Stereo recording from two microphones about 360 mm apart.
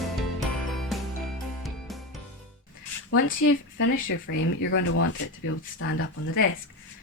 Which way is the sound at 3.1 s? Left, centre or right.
Left.